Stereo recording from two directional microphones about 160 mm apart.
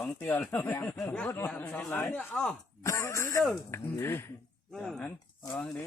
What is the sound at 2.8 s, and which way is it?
Speech, 20° left (ahead or behind).